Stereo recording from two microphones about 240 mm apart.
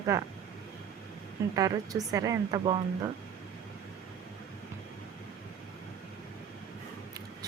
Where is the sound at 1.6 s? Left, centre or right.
Centre.